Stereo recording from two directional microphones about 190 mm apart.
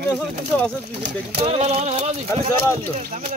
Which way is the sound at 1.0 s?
30° right (ahead or behind).